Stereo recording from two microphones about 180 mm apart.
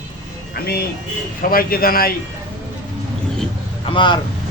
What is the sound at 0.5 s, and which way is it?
A man's voice, 60° left (ahead or behind).